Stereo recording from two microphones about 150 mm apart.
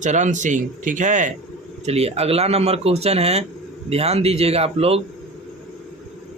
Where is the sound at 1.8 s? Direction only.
45° right (ahead or behind).